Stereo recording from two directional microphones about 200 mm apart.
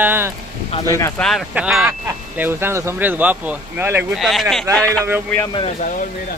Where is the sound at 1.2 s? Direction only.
Centre (ahead or behind).